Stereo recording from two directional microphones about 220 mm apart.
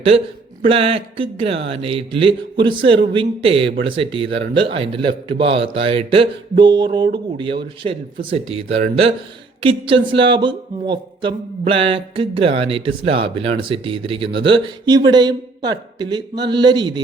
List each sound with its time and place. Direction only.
0.6 s speech: 25° right (ahead or behind)
8.3 s speech: 25° right (ahead or behind)